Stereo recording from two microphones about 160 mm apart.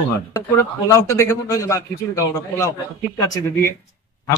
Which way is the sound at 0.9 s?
20° left (ahead or behind).